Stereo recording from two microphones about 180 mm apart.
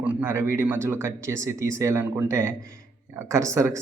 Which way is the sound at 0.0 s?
10° right (ahead or behind).